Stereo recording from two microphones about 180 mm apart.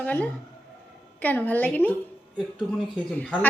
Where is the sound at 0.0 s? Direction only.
10° left (ahead or behind).